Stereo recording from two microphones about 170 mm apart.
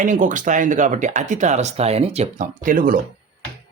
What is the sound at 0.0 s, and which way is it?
Speech, 50° right (ahead or behind).